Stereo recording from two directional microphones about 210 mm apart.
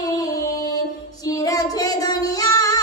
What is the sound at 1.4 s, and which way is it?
Child singing, 15° left (ahead or behind).